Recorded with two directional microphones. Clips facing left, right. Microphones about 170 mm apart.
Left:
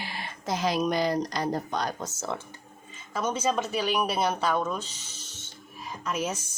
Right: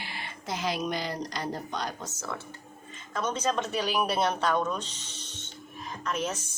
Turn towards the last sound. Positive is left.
turn(degrees=10)  # may be behind; listen again after turning